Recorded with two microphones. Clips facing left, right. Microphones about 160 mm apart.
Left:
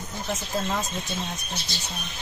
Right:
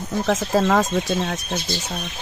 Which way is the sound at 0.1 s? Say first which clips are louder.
Right 11 dB; 85° right.